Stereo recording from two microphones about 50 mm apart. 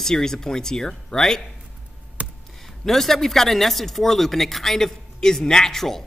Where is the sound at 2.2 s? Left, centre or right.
Right.